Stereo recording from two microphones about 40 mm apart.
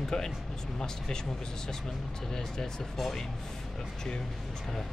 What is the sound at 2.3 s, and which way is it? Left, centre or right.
Speech, centre.